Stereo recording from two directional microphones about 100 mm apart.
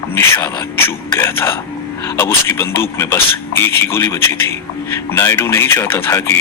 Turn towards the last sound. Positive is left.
turn(degrees=25)  # may be behind; listen again after turning